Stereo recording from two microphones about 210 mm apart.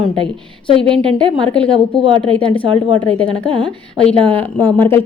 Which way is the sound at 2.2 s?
5° left (ahead or behind).